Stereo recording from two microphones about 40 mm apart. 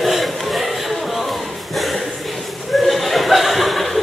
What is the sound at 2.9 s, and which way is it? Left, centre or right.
Chuckle, centre.